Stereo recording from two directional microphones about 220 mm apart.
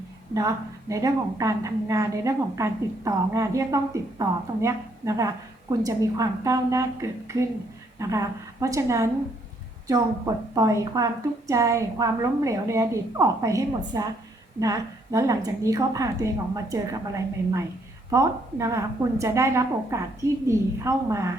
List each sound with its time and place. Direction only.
0.3 s a woman's voice: 15° right (ahead or behind)